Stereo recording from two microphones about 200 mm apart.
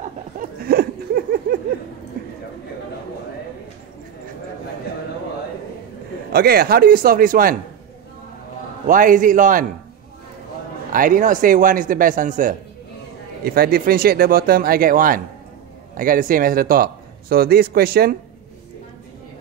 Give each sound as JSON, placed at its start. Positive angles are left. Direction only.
{"t": 0.4, "sound": "a sound", "side_deg": -50}
{"t": 6.3, "sound": "speech", "side_deg": -50}
{"t": 8.8, "sound": "a man's voice", "side_deg": -40}
{"t": 10.9, "sound": "speech", "side_deg": -45}